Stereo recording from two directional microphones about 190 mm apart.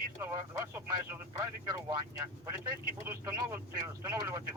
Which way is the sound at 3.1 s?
15° right (ahead or behind).